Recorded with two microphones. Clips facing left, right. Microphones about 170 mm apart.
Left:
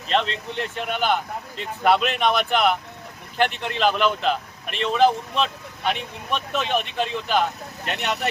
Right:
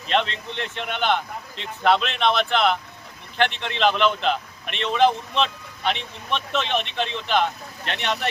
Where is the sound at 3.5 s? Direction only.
45° left (ahead or behind).